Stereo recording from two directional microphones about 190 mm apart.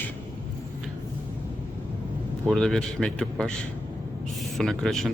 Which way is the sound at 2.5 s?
Centre (ahead or behind).